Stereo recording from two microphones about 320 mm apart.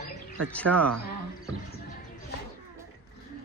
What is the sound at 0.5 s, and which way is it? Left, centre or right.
Speech, centre.